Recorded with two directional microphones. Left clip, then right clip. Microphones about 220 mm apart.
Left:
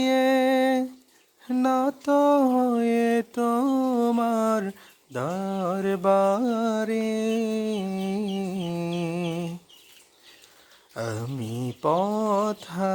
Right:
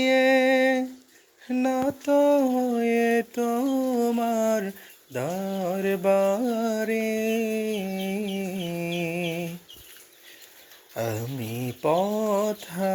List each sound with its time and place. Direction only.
0.0 s music: 15° left (ahead or behind)
1.5 s mantra: 15° left (ahead or behind)
10.9 s a sound: 10° left (ahead or behind)
12.2 s mantra: 15° left (ahead or behind)